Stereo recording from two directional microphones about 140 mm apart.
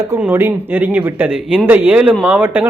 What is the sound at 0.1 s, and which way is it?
A man's voice, 15° right (ahead or behind).